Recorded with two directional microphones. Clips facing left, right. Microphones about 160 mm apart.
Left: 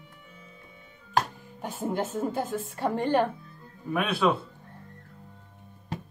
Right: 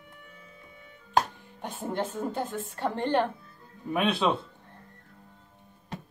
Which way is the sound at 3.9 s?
20° right (ahead or behind).